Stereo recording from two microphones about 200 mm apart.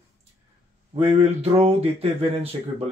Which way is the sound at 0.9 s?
30° right (ahead or behind).